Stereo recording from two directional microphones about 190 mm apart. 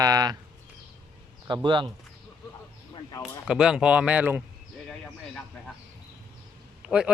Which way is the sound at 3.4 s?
5° right (ahead or behind).